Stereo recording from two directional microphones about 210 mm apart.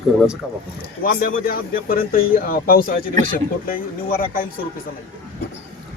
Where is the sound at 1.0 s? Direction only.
45° left (ahead or behind).